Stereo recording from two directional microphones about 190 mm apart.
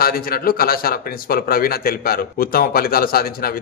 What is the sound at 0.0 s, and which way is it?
Speech, 50° left (ahead or behind).